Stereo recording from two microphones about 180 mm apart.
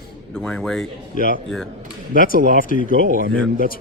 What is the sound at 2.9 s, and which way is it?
Speech, 55° right (ahead or behind).